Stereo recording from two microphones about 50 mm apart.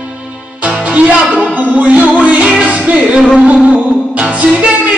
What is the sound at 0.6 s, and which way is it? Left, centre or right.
Music, right.